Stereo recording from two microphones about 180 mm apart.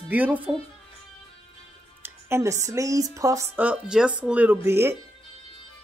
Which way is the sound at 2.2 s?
15° right (ahead or behind).